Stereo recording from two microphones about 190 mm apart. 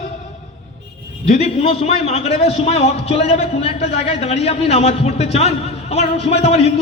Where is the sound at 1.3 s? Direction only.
35° left (ahead or behind).